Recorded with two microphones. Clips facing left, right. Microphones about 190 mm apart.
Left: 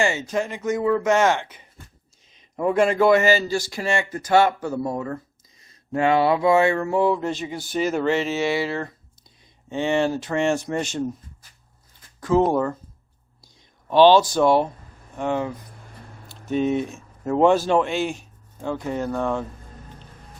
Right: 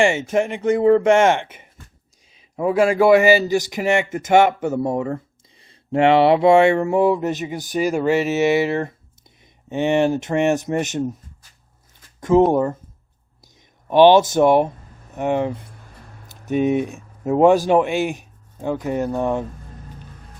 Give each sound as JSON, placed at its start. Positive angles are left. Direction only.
{"t": 0.0, "sound": "a man's voice", "side_deg": -25}
{"t": 2.3, "sound": "a man's voice", "side_deg": -5}
{"t": 12.5, "sound": "a man's voice", "side_deg": -20}
{"t": 13.9, "sound": "a man's voice", "side_deg": -15}